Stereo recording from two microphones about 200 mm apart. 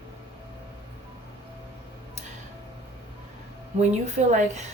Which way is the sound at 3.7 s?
35° right (ahead or behind).